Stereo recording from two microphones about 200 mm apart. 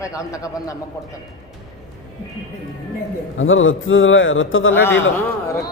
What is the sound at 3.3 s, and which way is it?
A man's voice, 75° left (ahead or behind).